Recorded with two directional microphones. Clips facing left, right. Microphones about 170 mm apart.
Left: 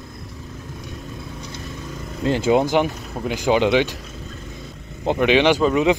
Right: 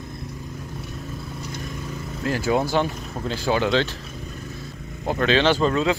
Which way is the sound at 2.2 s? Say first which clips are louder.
Left 5 dB; 25° left (ahead or behind).